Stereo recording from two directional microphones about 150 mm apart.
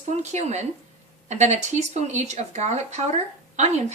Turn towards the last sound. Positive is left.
turn(degrees=-50)  # may be behind; listen again after turning